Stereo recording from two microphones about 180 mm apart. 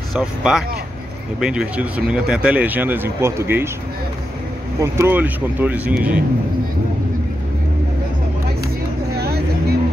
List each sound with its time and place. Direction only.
0.1 s speech: centre (ahead or behind)
4.9 s speech: 10° right (ahead or behind)
9.2 s vehicle: 60° right (ahead or behind)